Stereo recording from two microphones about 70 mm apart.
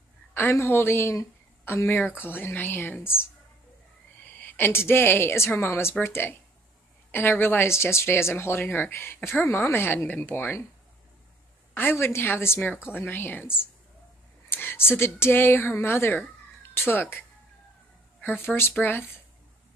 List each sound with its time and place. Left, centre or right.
0.3 s speech: left
4.2 s a woman's voice: left
11.7 s speech: left
18.2 s speech: left